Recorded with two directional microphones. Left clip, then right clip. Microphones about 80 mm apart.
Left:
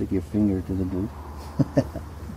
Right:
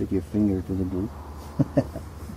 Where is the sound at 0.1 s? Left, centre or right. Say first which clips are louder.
Left 1 dB; centre.